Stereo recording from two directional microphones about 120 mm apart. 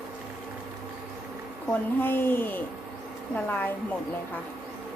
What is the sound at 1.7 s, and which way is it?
Speech, 15° left (ahead or behind).